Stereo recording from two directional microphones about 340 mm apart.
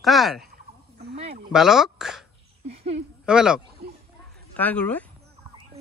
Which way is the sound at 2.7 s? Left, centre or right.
Centre.